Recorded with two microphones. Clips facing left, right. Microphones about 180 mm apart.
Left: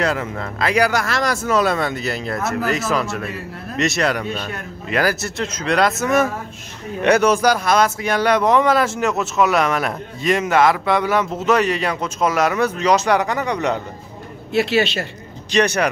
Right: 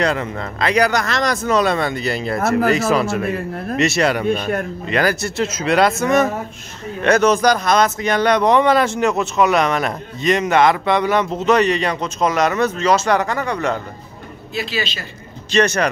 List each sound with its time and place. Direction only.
0.0 s speech: 5° left (ahead or behind)
14.5 s a man's voice: 70° left (ahead or behind)
15.5 s speech: 15° left (ahead or behind)